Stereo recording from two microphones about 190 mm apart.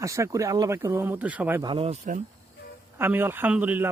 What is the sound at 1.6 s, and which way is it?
Speech, 25° right (ahead or behind).